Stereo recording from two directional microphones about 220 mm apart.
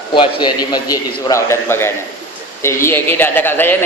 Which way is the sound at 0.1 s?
20° left (ahead or behind).